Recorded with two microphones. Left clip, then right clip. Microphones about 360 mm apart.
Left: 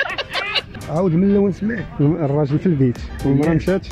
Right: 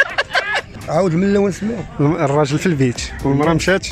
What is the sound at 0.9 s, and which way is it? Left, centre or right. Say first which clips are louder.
Speech: right 2 dB; right.